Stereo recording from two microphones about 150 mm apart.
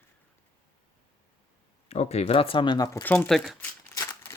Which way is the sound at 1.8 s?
45° left (ahead or behind).